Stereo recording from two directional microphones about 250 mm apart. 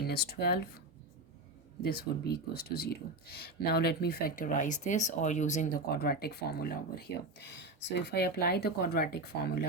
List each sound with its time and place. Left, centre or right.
0.0 s speech: left
1.8 s speech: left